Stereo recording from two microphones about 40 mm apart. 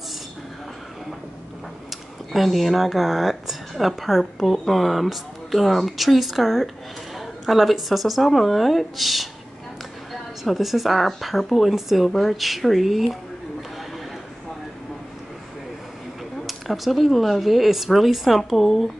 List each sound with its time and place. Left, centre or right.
1.9 s a woman's voice: centre
10.4 s speech: centre
16.4 s speech: centre